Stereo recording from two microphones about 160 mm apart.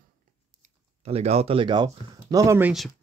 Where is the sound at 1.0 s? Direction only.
40° right (ahead or behind); by 2.7 s 15° right (ahead or behind).